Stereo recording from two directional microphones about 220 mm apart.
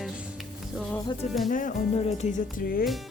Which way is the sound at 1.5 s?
35° left (ahead or behind).